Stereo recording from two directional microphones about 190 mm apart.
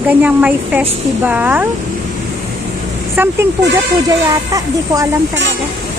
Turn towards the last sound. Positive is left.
turn(degrees=-15)  # may be behind; listen again after turning